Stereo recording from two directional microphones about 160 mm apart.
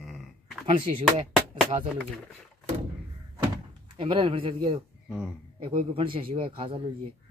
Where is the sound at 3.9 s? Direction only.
35° right (ahead or behind).